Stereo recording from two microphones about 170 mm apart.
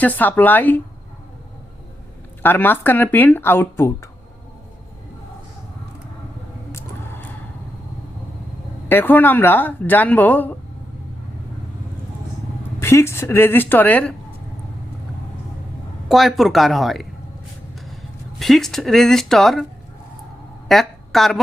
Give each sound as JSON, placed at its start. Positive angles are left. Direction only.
{"t": 0.0, "sound": "speech", "side_deg": 10}
{"t": 2.4, "sound": "speech", "side_deg": 10}
{"t": 6.7, "sound": "a sound", "side_deg": 15}
{"t": 8.9, "sound": "speech", "side_deg": 10}
{"t": 12.8, "sound": "speech", "side_deg": 15}
{"t": 16.0, "sound": "speech", "side_deg": 0}
{"t": 18.3, "sound": "speech", "side_deg": 0}
{"t": 20.7, "sound": "a sound", "side_deg": 0}